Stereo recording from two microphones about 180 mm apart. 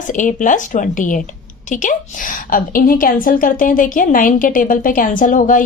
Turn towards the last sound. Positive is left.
turn(degrees=50)  # may be behind; listen again after turning